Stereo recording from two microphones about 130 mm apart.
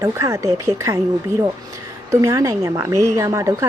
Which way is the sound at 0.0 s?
20° right (ahead or behind).